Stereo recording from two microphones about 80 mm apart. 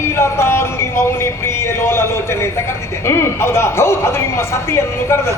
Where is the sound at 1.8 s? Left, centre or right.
Left.